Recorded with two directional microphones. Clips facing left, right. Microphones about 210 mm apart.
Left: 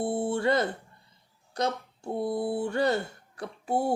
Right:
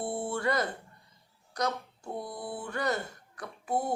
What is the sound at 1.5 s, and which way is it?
Speech, 25° left (ahead or behind).